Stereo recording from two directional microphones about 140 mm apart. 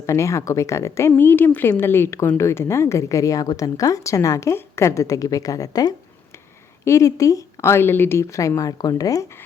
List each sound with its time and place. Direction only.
0.0 s speech: 20° left (ahead or behind)